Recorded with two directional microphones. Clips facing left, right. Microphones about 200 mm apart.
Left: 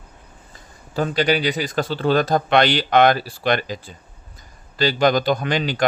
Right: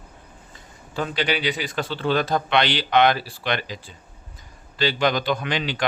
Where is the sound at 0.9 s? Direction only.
40° left (ahead or behind).